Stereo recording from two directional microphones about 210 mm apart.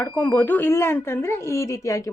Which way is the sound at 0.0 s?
10° left (ahead or behind).